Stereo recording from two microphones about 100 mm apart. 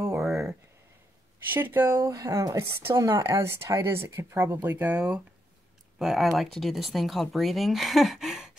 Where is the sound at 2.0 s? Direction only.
35° right (ahead or behind).